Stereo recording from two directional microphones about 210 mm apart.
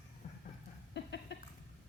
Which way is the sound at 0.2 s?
40° left (ahead or behind).